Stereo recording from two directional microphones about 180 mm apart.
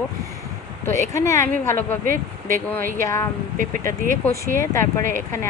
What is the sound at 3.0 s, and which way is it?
Speech, 15° left (ahead or behind).